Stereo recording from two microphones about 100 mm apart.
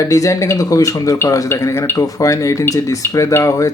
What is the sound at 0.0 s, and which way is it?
A man's voice, 35° left (ahead or behind).